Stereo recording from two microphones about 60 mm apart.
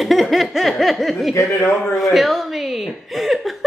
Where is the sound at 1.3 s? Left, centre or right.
Left.